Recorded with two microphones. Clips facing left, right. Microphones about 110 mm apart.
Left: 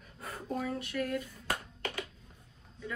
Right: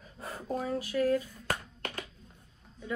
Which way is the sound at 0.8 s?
30° right (ahead or behind).